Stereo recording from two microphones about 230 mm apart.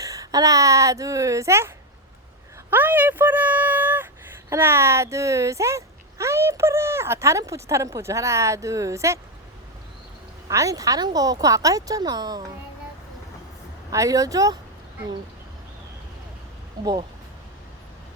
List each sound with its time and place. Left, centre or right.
0.0 s speech: centre
10.5 s speech: centre
13.9 s speech: centre
16.8 s speech: centre